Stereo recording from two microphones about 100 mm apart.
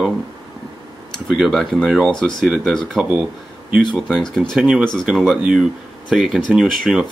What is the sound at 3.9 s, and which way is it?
Speech, 5° left (ahead or behind).